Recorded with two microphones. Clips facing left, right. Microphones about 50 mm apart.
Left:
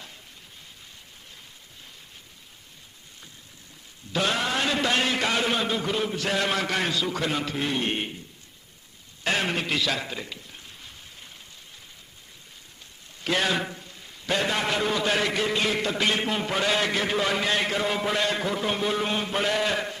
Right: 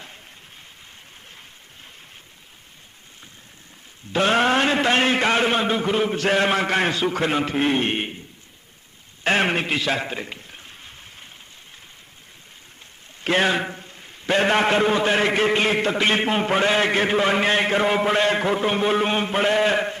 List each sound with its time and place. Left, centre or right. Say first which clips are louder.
4.1 s a man's voice: right 7 dB; right
6.1 s a man's voice: right 6 dB; right
9.2 s a sound: right 6 dB; right
13.2 s a man's voice: right 5 dB; right